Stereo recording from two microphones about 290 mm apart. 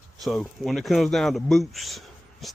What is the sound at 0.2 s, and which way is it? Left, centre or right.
Speech, centre.